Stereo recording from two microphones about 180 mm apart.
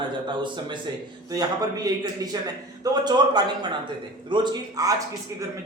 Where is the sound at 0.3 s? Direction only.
25° right (ahead or behind).